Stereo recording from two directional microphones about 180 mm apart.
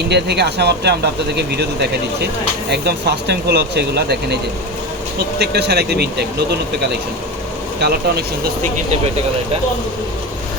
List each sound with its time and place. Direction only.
0.1 s speech: 65° right (ahead or behind)
5.4 s speech: 65° right (ahead or behind)
7.8 s speech: 65° right (ahead or behind)